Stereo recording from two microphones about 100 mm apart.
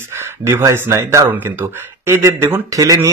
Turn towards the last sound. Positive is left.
turn(degrees=-35)  # may be behind; listen again after turning